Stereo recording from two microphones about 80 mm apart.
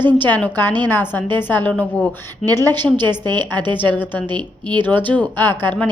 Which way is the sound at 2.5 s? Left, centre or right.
Right.